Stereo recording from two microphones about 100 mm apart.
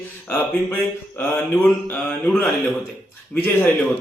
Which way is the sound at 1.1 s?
20° left (ahead or behind).